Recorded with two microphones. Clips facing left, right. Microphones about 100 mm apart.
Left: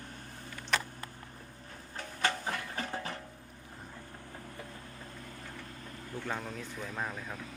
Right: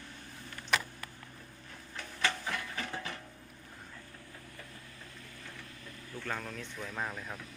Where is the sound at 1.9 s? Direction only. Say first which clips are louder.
Left 2 dB; 40° left (ahead or behind).